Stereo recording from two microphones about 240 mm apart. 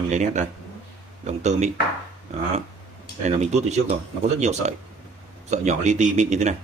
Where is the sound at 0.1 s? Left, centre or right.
Right.